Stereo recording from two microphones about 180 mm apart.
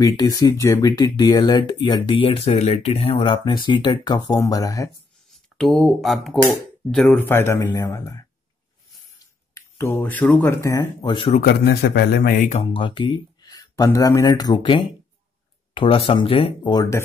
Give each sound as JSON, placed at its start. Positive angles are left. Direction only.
{"t": 0.0, "sound": "speech", "side_deg": 20}
{"t": 5.6, "sound": "speech", "side_deg": 0}
{"t": 11.4, "sound": "speech", "side_deg": 65}
{"t": 12.6, "sound": "speech", "side_deg": 30}